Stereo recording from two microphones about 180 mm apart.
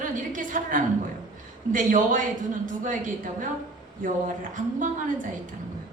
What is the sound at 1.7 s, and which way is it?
Speech, 45° right (ahead or behind).